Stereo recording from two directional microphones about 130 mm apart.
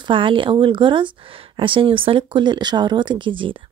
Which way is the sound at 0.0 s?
40° right (ahead or behind).